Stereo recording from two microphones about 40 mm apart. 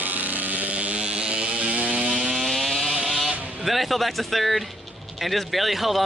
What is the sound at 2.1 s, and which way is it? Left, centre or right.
Chainsaw, centre.